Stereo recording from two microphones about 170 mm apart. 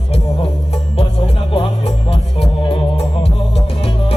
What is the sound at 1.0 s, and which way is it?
Music, 30° left (ahead or behind).